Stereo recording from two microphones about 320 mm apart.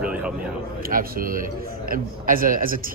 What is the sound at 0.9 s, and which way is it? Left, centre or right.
A man's voice, right.